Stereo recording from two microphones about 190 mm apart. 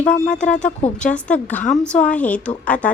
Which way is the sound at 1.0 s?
5° left (ahead or behind).